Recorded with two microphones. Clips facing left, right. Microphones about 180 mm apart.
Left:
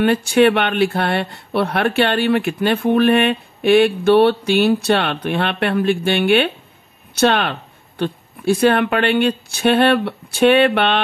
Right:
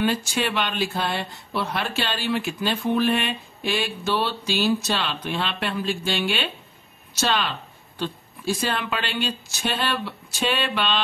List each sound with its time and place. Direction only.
0.0 s speech: 60° left (ahead or behind)